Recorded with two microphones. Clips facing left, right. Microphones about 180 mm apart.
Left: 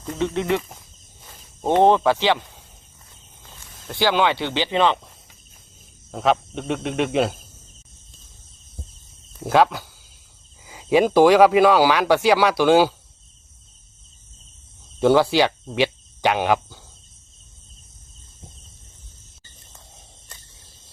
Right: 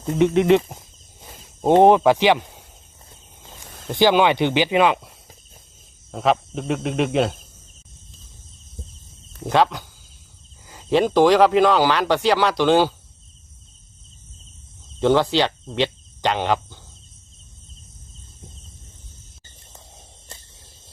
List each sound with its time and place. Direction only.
0.0 s speech: 20° right (ahead or behind)
1.8 s speech: 15° right (ahead or behind)
3.8 s speech: 15° right (ahead or behind)
6.1 s speech: centre (ahead or behind)
9.4 s speech: 5° left (ahead or behind)
14.9 s speech: 10° left (ahead or behind)